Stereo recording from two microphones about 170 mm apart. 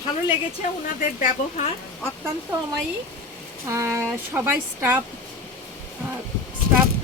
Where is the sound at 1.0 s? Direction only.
50° left (ahead or behind).